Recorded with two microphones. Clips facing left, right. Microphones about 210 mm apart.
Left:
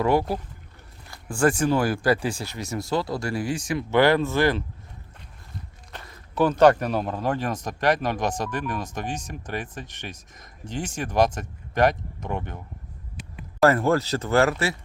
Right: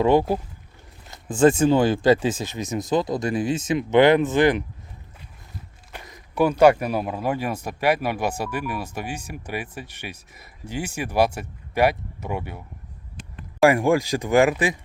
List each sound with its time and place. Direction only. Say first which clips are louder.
0.0 s speech: right 4 dB; 20° right (ahead or behind)
5.9 s speech: right 1 dB; 15° right (ahead or behind)
13.6 s speech: right 2 dB; 15° right (ahead or behind)